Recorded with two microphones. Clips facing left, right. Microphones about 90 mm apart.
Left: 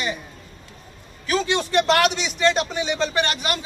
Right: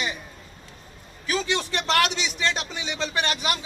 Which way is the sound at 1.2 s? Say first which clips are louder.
Left 4 dB; centre (ahead or behind).